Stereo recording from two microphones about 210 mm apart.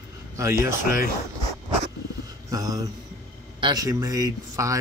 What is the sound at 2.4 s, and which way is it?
Speech, 15° right (ahead or behind).